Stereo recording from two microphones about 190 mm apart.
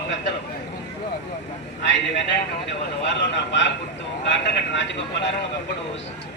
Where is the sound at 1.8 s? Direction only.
70° left (ahead or behind).